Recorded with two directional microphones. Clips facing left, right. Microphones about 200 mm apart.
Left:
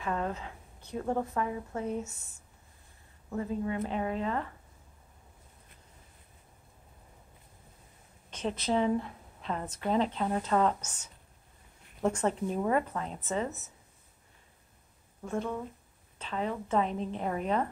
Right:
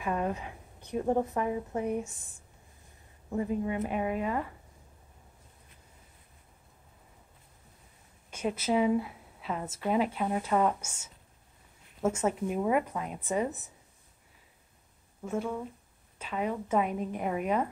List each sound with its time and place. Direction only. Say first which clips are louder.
0.0 s a woman's voice: right 2 dB; 15° right (ahead or behind)
8.3 s a woman's voice: right 1 dB; 10° right (ahead or behind)
15.2 s a woman's voice: right 1 dB; 5° right (ahead or behind)